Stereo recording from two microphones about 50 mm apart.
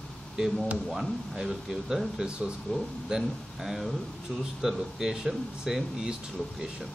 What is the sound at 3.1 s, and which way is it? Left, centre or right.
Speech, centre.